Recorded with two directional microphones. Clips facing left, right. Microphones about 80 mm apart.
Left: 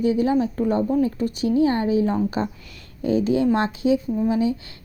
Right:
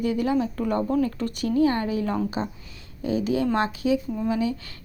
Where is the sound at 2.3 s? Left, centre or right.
Left.